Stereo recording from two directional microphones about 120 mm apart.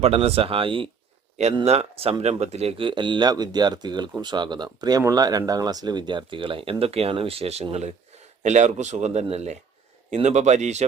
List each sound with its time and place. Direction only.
0.0 s speech: 55° right (ahead or behind)
1.6 s speech: 60° right (ahead or behind); by 10.8 s 75° right (ahead or behind)